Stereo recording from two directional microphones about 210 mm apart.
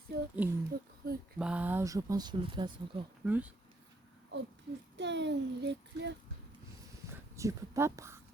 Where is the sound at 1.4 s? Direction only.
5° right (ahead or behind); by 3.0 s 20° right (ahead or behind).